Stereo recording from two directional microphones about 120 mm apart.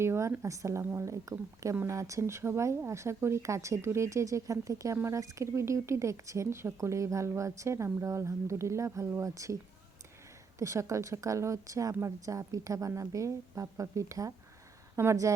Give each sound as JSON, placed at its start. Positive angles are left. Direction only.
{"t": 0.0, "sound": "speech", "side_deg": -20}
{"t": 10.6, "sound": "speech", "side_deg": -25}